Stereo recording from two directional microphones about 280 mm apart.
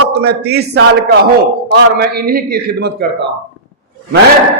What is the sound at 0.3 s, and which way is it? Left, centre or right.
A man's voice, right.